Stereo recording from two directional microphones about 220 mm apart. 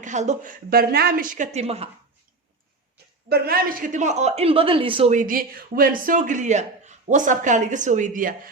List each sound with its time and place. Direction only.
0.0 s speech: 30° right (ahead or behind)
3.2 s speech: 45° right (ahead or behind)